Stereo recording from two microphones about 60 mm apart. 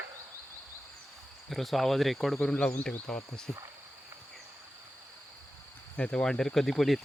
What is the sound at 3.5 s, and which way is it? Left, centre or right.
Speech, centre.